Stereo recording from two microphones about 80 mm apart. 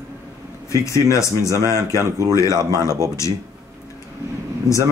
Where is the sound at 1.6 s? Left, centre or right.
Right.